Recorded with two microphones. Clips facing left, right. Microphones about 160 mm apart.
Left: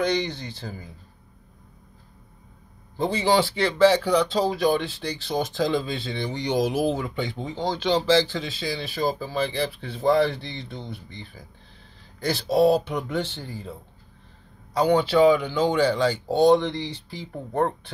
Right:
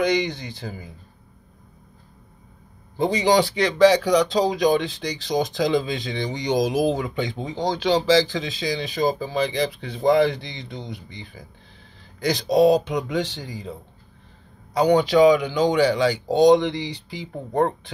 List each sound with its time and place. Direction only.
0.0 s speech: 15° right (ahead or behind)
3.0 s speech: 15° right (ahead or behind)